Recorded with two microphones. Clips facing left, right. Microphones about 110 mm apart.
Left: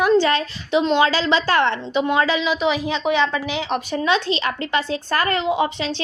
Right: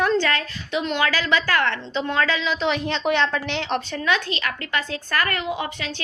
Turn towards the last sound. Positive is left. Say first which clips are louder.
# left 7 dB
turn(degrees=20)  # may be behind; listen again after turning